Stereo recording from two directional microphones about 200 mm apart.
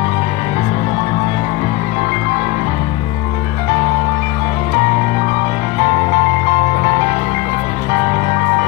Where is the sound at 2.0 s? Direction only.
35° right (ahead or behind).